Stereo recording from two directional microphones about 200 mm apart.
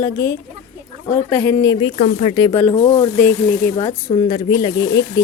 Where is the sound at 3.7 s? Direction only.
20° left (ahead or behind).